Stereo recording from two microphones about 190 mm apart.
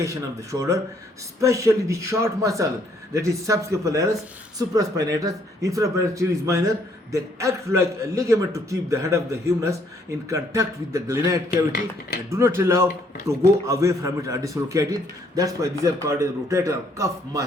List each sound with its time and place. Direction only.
0.0 s speech: 15° right (ahead or behind)
10.2 s speech: 15° right (ahead or behind)